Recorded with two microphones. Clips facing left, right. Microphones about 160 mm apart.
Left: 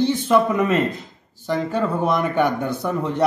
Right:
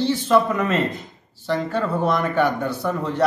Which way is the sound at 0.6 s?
15° left (ahead or behind).